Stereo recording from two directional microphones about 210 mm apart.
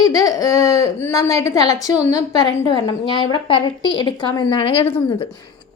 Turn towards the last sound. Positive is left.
turn(degrees=25)  # may be behind; listen again after turning